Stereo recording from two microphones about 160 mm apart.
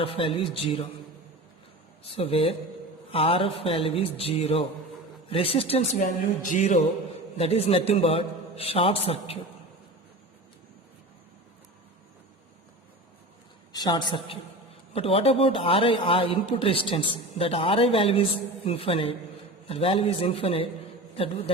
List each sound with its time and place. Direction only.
0.0 s a man's voice: 35° left (ahead or behind)
2.0 s a man's voice: 35° left (ahead or behind); by 6.7 s 55° left (ahead or behind)
7.3 s a man's voice: 40° left (ahead or behind)
13.7 s a woman's voice: 25° left (ahead or behind)